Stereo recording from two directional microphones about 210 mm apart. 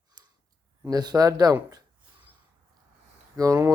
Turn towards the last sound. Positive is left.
turn(degrees=-15)  # may be behind; listen again after turning